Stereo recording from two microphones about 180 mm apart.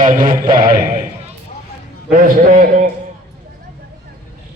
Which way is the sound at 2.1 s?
45° right (ahead or behind).